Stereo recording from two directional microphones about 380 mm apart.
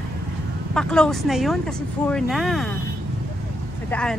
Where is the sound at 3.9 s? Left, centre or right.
Centre.